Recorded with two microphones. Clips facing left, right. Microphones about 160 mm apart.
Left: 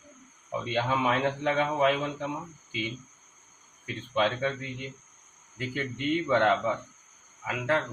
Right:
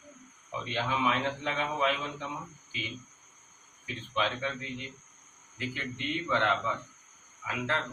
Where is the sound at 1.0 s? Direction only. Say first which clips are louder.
Left 4 dB; 50° left (ahead or behind).